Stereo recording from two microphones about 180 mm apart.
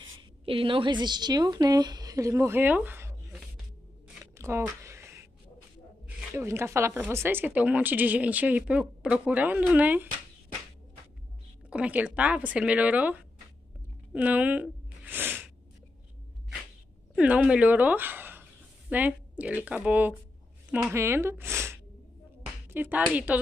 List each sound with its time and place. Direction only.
0.5 s a woman's voice: 30° right (ahead or behind); by 3.2 s 10° right (ahead or behind)
4.2 s a sound: 15° right (ahead or behind)
6.0 s speech: 15° right (ahead or behind)
11.7 s speech: 5° right (ahead or behind)
14.1 s a sound: 10° right (ahead or behind)
17.1 s speech: 5° right (ahead or behind)